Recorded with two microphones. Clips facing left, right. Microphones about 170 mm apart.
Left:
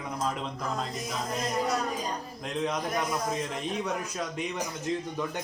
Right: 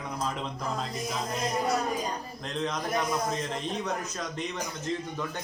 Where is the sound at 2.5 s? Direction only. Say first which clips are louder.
Left 1 dB; 10° left (ahead or behind).